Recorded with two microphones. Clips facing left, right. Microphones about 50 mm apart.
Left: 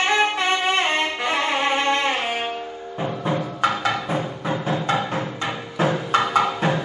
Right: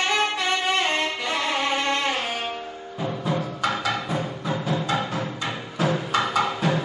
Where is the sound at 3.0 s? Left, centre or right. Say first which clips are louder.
Left 2 dB; left.